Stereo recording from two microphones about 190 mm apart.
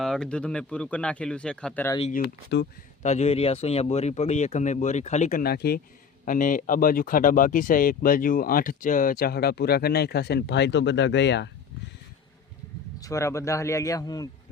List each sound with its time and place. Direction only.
0.0 s speech: 5° left (ahead or behind)
2.0 s speech: 35° left (ahead or behind); by 11.4 s 65° left (ahead or behind)
13.0 s a man's voice: 15° left (ahead or behind)